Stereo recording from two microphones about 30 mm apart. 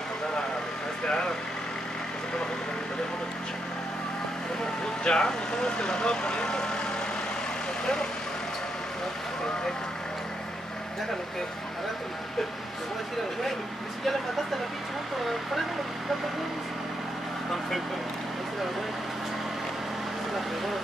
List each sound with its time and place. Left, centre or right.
1.0 s vehicle: left
5.0 s speech: left
7.8 s speech: left